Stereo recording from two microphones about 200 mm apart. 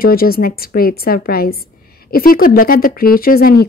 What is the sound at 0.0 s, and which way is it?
Speech, 50° left (ahead or behind).